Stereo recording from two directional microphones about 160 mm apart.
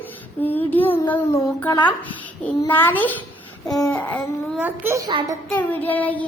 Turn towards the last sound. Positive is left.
turn(degrees=10)  # may be behind; listen again after turning